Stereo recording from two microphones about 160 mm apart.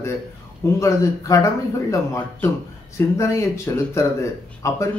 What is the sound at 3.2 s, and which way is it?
Speech, 20° left (ahead or behind).